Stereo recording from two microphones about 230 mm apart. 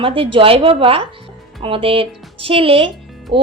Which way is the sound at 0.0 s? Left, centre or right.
Right.